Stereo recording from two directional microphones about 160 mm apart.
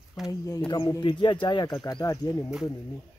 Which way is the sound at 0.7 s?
25° left (ahead or behind).